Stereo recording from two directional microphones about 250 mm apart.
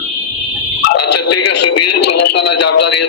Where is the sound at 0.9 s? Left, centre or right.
Left.